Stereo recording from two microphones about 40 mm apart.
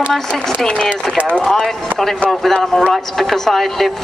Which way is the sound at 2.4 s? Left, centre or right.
Centre.